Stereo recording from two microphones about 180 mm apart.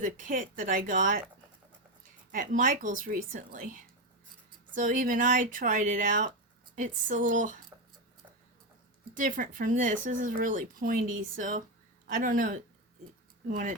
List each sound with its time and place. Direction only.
0.0 s speech: 45° right (ahead or behind)
2.3 s speech: 50° right (ahead or behind)
7.7 s a sound: 15° right (ahead or behind)
9.1 s speech: 45° right (ahead or behind)